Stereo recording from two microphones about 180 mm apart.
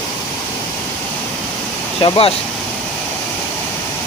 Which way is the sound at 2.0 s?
30° left (ahead or behind).